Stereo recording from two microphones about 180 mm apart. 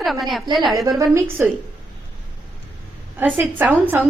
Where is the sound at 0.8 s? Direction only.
15° right (ahead or behind).